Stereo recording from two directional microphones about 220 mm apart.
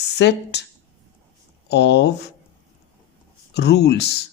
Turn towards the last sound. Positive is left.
turn(degrees=50)  # may be behind; listen again after turning